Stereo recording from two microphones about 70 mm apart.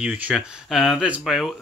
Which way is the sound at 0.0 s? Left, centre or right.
Centre.